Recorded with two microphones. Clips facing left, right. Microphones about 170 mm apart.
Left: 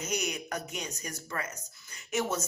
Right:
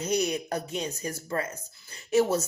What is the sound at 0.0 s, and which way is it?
Speech, 30° right (ahead or behind).